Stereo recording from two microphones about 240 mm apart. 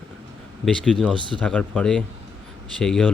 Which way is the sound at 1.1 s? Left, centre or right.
Centre.